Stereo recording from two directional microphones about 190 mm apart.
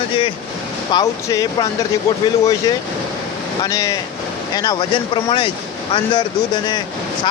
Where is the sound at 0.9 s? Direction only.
20° left (ahead or behind).